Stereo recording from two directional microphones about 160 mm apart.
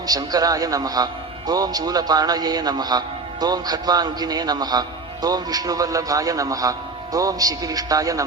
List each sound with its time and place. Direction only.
0.1 s a man's voice: 25° right (ahead or behind)